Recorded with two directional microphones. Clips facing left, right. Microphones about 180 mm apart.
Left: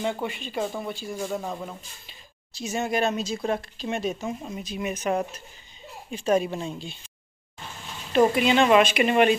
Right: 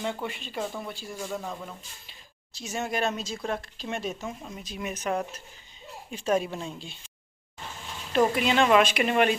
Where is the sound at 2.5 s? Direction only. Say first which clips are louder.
Left 4 dB; 5° left (ahead or behind).